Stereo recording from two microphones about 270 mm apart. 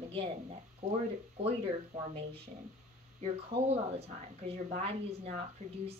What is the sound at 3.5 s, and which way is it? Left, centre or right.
Speech, right.